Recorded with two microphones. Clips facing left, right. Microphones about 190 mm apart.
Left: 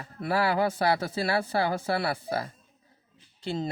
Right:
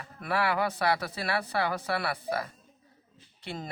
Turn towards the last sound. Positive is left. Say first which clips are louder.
# left 7 dB
turn(degrees=25)  # may be behind; listen again after turning